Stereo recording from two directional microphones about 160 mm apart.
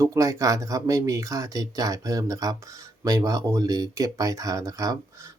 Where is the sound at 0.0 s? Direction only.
20° right (ahead or behind).